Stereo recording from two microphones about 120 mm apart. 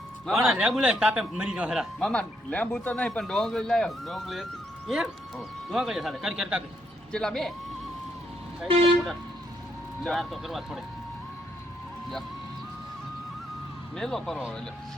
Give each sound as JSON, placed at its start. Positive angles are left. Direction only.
{"t": 0.3, "sound": "a man's voice", "side_deg": 0}
{"t": 2.0, "sound": "speech", "side_deg": 10}
{"t": 8.6, "sound": "speech", "side_deg": -50}
{"t": 10.0, "sound": "speech", "side_deg": 0}
{"t": 13.9, "sound": "speech", "side_deg": 5}